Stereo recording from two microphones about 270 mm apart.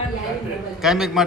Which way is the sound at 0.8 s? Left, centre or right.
Centre.